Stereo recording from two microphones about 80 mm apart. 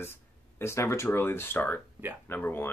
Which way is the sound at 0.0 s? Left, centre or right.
Left.